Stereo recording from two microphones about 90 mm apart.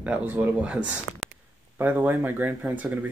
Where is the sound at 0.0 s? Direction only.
20° right (ahead or behind).